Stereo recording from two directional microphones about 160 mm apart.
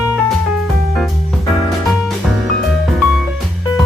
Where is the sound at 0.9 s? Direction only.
Centre (ahead or behind).